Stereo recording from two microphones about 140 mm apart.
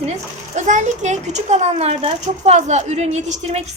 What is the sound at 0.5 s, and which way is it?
A woman's voice, 60° right (ahead or behind).